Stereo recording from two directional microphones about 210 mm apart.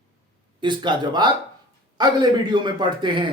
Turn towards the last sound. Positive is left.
turn(degrees=-25)  # may be behind; listen again after turning